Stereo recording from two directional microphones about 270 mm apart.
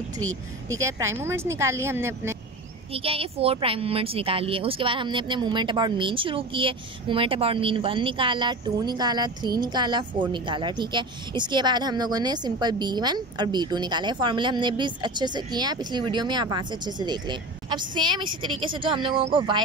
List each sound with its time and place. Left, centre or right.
0.7 s a woman's voice: centre
2.9 s a woman's voice: right